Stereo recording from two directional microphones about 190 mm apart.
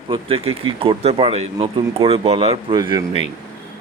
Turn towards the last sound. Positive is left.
turn(degrees=-20)  # may be behind; listen again after turning